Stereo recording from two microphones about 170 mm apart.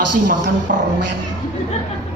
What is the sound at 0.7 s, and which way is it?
Speech, 60° right (ahead or behind).